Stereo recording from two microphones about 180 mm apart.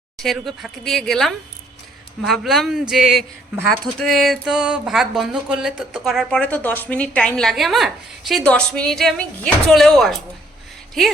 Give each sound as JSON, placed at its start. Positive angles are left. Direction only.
{"t": 0.2, "sound": "speech", "side_deg": 0}